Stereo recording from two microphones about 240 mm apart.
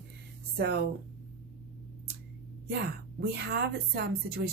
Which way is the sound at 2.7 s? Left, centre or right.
Right.